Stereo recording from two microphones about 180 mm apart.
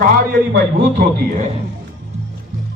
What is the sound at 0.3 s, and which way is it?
A man's voice, 55° right (ahead or behind).